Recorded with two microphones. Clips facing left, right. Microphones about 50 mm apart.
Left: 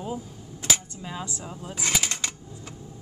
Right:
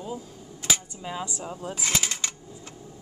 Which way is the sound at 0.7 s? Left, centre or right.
Centre.